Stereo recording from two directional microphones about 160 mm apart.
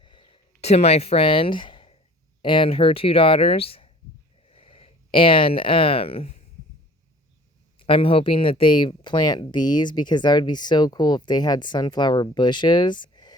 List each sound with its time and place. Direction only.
0.0 s a sound: 30° left (ahead or behind)
0.6 s speech: 40° left (ahead or behind)
7.8 s speech: 35° left (ahead or behind)